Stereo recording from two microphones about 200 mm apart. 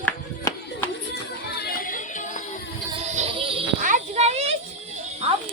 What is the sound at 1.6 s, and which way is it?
Music, 50° left (ahead or behind).